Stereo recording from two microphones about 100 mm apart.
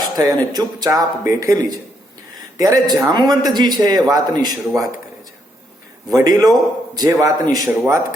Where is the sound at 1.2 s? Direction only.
30° right (ahead or behind).